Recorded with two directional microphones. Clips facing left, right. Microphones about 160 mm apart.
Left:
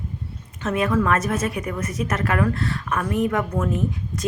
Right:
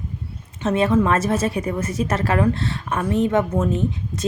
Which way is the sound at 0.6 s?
30° right (ahead or behind).